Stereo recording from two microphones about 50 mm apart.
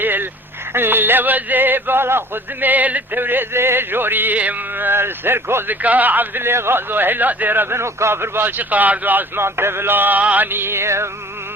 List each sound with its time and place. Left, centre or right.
0.0 s a sound: right
0.7 s speech: right
5.8 s speech: right
7.8 s speech: right
9.4 s a sound: right
10.5 s music: right